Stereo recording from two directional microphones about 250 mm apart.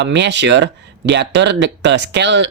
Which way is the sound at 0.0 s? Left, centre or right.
Right.